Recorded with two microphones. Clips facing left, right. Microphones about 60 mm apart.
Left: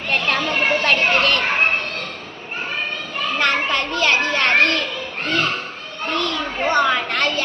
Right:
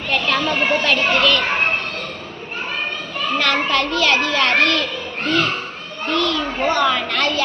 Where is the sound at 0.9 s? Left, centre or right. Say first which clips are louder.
Even; left.